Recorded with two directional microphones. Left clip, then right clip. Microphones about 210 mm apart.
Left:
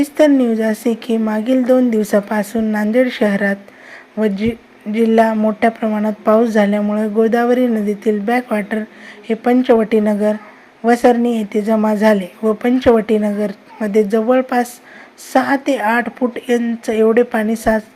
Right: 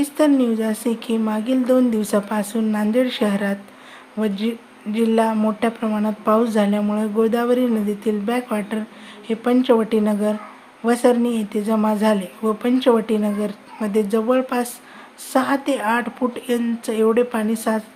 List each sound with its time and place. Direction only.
0.0 s speech: 15° left (ahead or behind)